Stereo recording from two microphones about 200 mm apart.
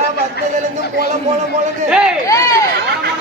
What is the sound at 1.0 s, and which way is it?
Speech, 35° right (ahead or behind).